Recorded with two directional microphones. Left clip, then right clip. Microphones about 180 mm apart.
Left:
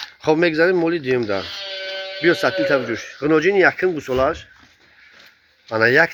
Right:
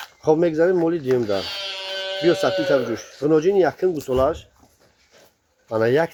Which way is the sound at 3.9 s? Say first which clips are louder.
Even; 20° left (ahead or behind).